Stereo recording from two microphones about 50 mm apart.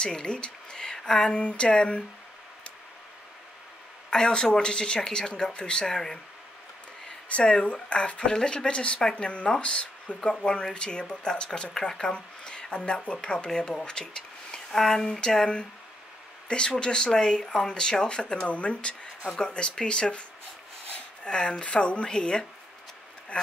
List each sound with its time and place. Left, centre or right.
0.0 s speech: centre
4.1 s speech: centre
7.2 s speech: left